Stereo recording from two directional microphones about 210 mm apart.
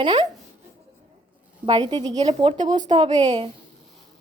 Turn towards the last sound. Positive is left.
turn(degrees=-25)  # may be behind; listen again after turning